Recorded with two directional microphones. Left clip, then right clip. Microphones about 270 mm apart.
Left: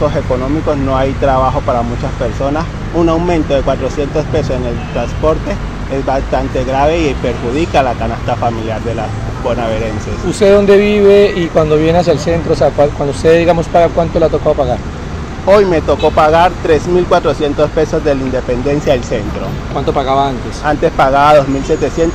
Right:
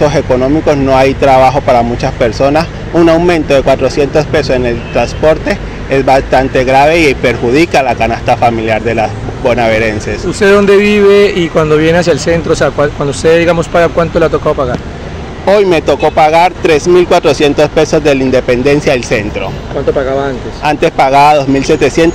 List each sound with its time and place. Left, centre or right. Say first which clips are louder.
0.7 s speech: right 6 dB; right
10.4 s speech: right 1 dB; right
15.4 s speech: right 1 dB; right
20.6 s speech: right 2 dB; right